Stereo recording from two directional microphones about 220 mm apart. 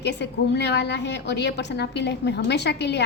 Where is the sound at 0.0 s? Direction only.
50° left (ahead or behind).